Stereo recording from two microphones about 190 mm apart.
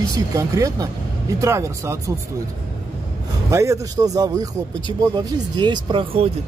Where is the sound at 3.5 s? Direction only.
15° right (ahead or behind).